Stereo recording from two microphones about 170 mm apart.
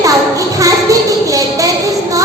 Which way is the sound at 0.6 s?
20° right (ahead or behind).